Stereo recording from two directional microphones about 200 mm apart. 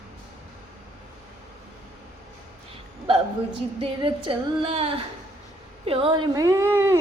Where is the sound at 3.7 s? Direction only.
25° right (ahead or behind).